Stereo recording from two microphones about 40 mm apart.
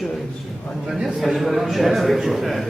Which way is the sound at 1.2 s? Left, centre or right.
Centre.